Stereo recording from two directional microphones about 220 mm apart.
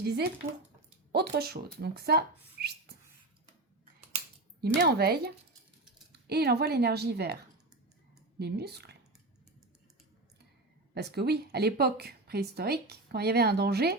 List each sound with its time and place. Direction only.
0.0 s speech: 50° right (ahead or behind)
4.6 s speech: 45° right (ahead or behind)
8.4 s speech: 45° right (ahead or behind)
10.9 s speech: 50° right (ahead or behind)